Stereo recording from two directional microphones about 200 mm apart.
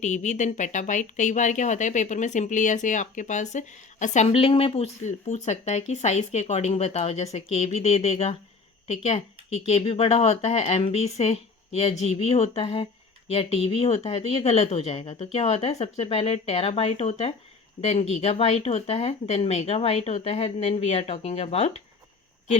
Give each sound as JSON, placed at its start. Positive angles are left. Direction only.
{"t": 0.0, "sound": "speech", "side_deg": 40}